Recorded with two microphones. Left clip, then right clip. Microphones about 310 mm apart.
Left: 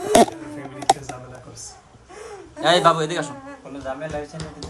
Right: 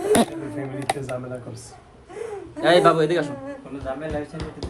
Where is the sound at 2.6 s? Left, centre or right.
Centre.